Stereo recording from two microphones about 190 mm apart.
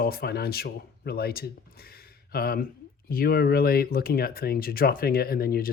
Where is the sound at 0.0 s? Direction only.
55° left (ahead or behind).